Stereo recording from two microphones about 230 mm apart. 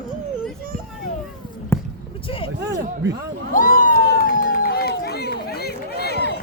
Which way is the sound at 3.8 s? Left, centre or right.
Left.